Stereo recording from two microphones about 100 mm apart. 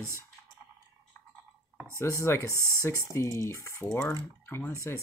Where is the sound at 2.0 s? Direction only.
30° left (ahead or behind).